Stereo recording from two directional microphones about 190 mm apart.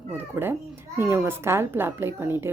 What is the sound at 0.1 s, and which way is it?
Speech, 10° right (ahead or behind).